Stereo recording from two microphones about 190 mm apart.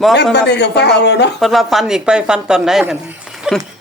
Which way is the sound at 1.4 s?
Centre (ahead or behind).